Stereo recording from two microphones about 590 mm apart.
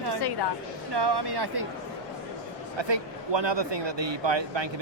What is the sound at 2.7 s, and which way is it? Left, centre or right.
Speech, right.